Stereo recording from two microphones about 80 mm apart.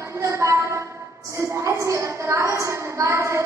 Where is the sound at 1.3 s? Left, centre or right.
Right.